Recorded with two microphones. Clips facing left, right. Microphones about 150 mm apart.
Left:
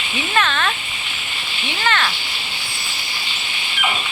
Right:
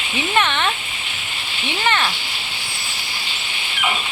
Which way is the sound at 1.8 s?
20° right (ahead or behind).